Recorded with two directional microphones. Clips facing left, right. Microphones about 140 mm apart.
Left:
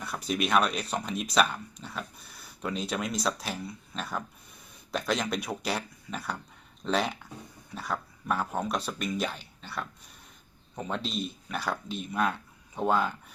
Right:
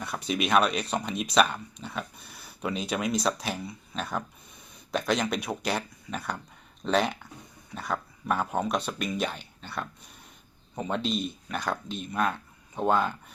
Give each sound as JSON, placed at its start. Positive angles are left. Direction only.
{"t": 0.0, "sound": "speech", "side_deg": 0}